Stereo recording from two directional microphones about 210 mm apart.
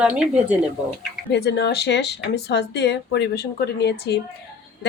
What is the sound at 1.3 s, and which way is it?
Speech, 50° left (ahead or behind).